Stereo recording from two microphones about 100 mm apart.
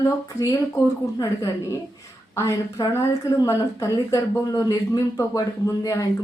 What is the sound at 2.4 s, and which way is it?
A woman's voice, 30° left (ahead or behind).